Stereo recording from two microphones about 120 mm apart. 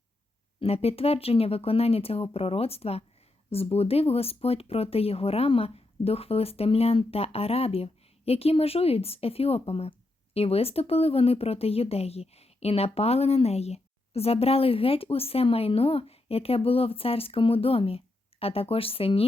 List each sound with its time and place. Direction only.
0.6 s speech: 55° left (ahead or behind)